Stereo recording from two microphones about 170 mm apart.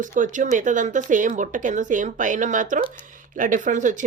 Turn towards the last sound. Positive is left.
turn(degrees=-50)  # may be behind; listen again after turning